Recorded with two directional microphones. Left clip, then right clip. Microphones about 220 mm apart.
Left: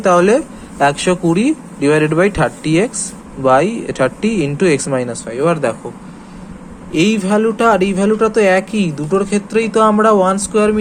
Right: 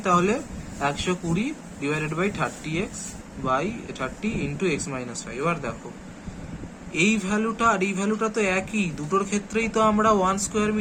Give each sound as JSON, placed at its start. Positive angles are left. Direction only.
{"t": 0.0, "sound": "speech", "side_deg": 25}
{"t": 6.9, "sound": "speech", "side_deg": 20}